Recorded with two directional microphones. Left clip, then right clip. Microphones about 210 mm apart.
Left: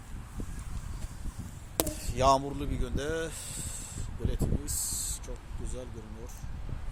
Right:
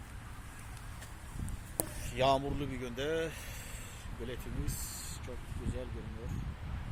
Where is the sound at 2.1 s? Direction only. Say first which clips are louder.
Left 5 dB; 25° left (ahead or behind).